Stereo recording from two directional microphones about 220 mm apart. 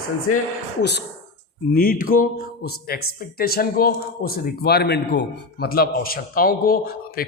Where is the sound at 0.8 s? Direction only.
50° left (ahead or behind).